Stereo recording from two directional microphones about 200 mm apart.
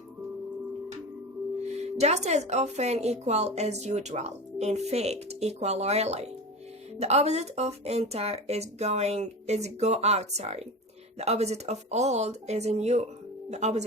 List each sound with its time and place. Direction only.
1.7 s speech: 35° right (ahead or behind)